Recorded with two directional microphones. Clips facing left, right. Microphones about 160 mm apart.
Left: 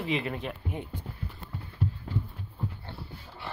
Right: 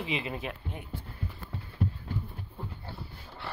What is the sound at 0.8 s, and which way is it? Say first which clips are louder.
Speech: left 3 dB; 20° left (ahead or behind).